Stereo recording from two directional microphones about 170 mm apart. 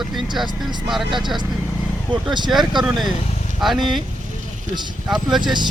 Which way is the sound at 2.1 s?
25° right (ahead or behind).